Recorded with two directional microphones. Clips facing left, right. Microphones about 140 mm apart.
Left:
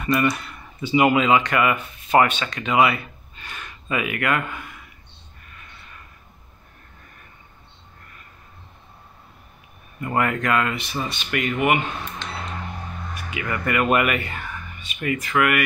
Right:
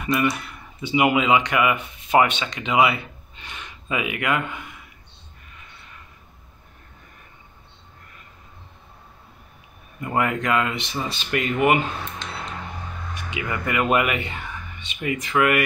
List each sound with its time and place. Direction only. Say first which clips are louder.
0.0 s speech: left 1 dB; 15° right (ahead or behind)
10.0 s speech: even; 15° right (ahead or behind)
13.1 s speech: even; 20° right (ahead or behind)